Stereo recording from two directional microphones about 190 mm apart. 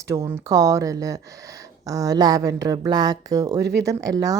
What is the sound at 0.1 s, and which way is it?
Speech, 15° right (ahead or behind).